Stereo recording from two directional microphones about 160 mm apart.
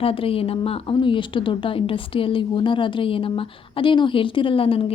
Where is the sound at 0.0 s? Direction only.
35° left (ahead or behind).